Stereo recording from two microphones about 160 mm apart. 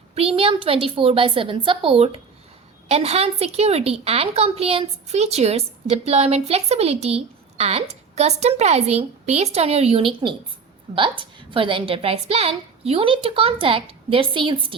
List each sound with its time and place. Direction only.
0.1 s a woman's voice: 35° right (ahead or behind)